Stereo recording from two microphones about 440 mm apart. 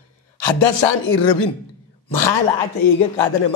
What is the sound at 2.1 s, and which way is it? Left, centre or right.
Speech, left.